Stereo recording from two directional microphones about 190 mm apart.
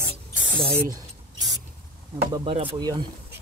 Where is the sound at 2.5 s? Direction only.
25° right (ahead or behind).